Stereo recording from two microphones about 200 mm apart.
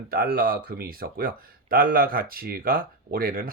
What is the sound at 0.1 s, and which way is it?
Speech, 50° right (ahead or behind).